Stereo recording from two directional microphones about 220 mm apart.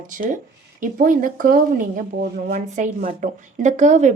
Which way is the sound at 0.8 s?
40° right (ahead or behind).